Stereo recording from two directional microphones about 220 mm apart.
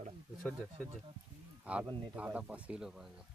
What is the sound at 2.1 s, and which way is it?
Speech, 5° right (ahead or behind).